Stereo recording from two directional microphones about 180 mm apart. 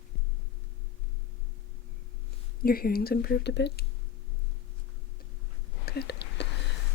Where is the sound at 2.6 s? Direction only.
55° left (ahead or behind).